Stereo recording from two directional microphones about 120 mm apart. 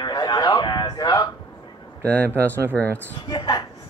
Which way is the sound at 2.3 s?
20° right (ahead or behind).